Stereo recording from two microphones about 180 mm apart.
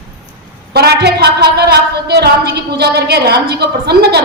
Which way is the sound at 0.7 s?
60° right (ahead or behind).